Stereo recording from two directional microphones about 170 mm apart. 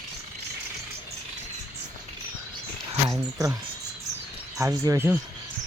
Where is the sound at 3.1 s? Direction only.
20° right (ahead or behind).